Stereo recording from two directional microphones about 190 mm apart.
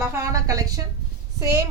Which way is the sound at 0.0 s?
15° right (ahead or behind).